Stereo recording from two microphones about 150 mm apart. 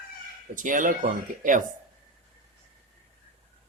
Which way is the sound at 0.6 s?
60° right (ahead or behind).